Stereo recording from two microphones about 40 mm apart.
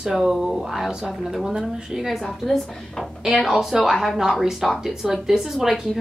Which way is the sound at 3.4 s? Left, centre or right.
Centre.